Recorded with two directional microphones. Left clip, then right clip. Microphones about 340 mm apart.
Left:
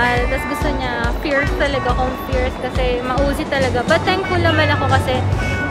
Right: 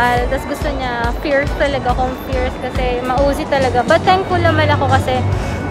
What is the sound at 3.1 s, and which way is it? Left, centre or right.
Speech, centre.